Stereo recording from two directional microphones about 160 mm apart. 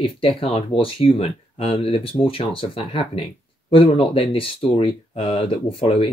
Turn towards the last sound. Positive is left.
turn(degrees=35)  # may be behind; listen again after turning